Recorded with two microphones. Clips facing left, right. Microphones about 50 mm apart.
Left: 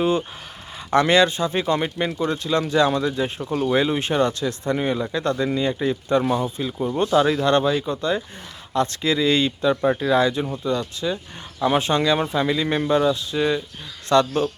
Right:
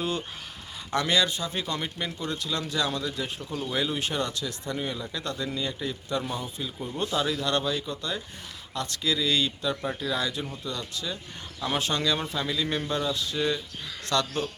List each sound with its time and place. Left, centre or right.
0.0 s speech: left
0.9 s speech: left
3.4 s speech: left
3.8 s speech: left
6.2 s speech: left
7.0 s speech: left
10.4 s speech: left
10.7 s speech: left